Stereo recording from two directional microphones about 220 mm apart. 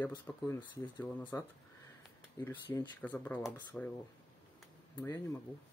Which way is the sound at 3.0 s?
5° left (ahead or behind).